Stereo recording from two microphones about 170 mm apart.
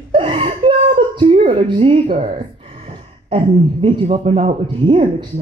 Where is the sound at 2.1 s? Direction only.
45° right (ahead or behind).